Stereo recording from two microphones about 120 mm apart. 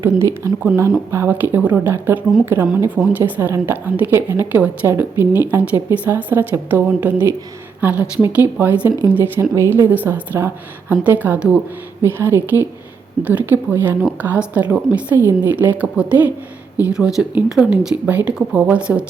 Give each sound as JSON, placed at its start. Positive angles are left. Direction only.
{"t": 0.0, "sound": "a woman's voice", "side_deg": -25}